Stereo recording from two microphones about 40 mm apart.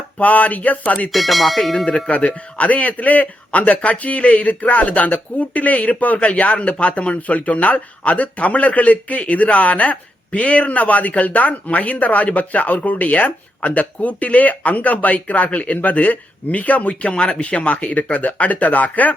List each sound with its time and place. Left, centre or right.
0.2 s speech: left
1.1 s speech: centre
2.0 s speech: left
17.1 s speech: left